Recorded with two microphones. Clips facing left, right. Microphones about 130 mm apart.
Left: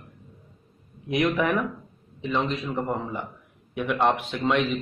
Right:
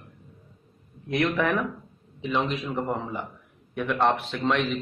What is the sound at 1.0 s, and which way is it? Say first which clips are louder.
A man's voice: left 1 dB; 15° left (ahead or behind).